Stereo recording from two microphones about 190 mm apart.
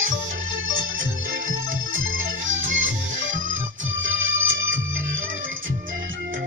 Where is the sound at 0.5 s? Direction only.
90° right.